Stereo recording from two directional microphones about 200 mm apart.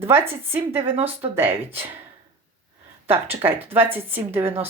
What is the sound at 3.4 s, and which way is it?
Speech, 10° right (ahead or behind).